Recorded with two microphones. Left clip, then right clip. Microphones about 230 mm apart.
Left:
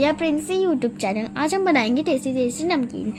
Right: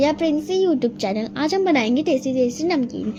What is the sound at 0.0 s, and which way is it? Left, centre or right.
A woman's voice, centre.